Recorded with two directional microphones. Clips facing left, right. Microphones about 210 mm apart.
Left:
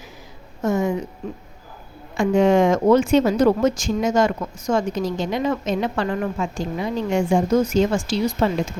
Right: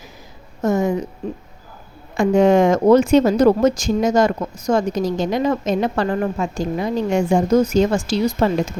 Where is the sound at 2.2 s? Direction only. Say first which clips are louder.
Right 2 dB; 40° right (ahead or behind).